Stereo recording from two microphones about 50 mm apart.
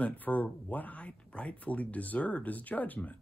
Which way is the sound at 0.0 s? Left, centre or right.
Left.